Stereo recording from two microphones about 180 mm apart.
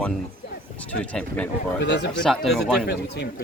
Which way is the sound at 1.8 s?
80° left.